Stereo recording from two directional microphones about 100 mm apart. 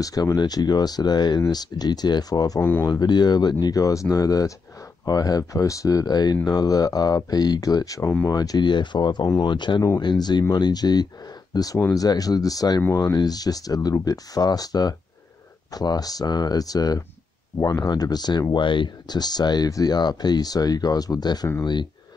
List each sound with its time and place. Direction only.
0.0 s speech: 35° left (ahead or behind)
2.6 s speech: 20° left (ahead or behind)
2.9 s speech: 45° left (ahead or behind)
18.5 s speech: 55° left (ahead or behind)